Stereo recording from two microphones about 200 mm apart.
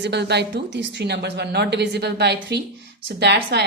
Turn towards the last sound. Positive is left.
turn(degrees=-55)  # may be behind; listen again after turning